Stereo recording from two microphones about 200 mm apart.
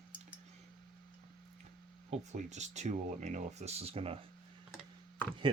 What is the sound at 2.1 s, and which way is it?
Speech, 35° right (ahead or behind).